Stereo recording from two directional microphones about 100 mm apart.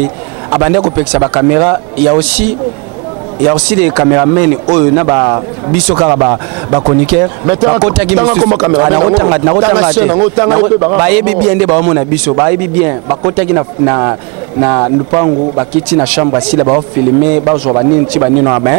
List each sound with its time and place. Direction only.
0.5 s speech: 25° right (ahead or behind)
3.4 s speech: 20° right (ahead or behind)
15.9 s speech: 20° right (ahead or behind)